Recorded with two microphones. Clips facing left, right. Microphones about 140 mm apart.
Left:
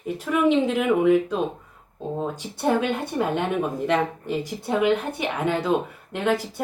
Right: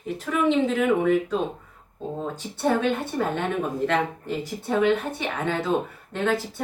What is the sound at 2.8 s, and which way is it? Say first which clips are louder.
A woman's voice: even; 15° left (ahead or behind).